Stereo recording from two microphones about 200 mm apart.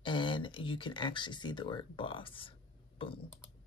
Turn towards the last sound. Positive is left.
turn(degrees=25)  # may be behind; listen again after turning